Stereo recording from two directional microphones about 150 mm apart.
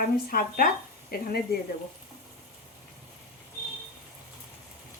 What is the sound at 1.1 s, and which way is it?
Speech, 85° left.